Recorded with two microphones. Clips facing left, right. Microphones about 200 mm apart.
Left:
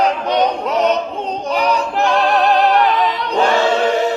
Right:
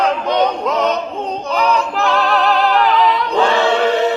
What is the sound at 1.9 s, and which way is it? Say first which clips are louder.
Opera: left 1 dB; 25° left (ahead or behind).